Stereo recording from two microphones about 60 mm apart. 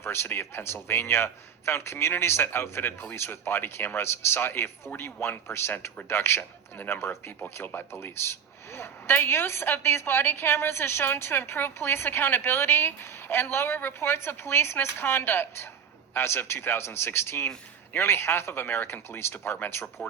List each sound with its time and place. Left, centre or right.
0.0 s a woman's voice: left